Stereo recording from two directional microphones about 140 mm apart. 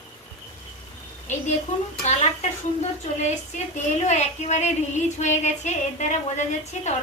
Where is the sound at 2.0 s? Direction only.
50° left (ahead or behind).